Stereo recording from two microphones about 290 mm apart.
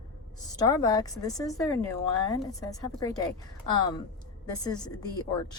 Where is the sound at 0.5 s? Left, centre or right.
Centre.